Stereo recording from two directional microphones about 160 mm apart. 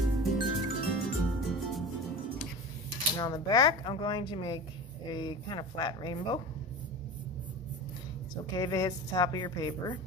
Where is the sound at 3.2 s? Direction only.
25° left (ahead or behind).